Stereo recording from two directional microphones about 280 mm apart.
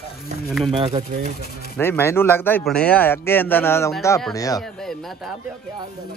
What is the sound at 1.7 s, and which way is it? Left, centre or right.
Speech, centre.